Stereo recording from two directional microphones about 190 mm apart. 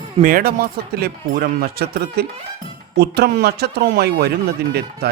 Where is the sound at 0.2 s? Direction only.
45° right (ahead or behind).